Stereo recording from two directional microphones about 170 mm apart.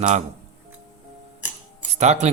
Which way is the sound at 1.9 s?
40° right (ahead or behind).